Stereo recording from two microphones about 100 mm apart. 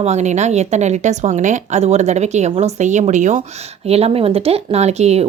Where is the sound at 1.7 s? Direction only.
90° right.